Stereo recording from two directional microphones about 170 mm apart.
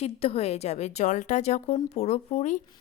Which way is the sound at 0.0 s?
35° left (ahead or behind).